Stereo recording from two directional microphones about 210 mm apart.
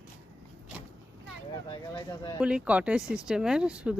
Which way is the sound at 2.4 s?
5° right (ahead or behind).